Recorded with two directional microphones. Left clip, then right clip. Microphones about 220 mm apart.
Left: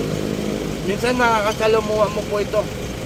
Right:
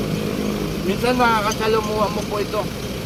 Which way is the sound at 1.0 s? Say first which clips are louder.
Even; centre (ahead or behind).